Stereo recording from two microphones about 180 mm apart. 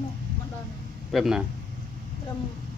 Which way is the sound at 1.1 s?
Centre (ahead or behind).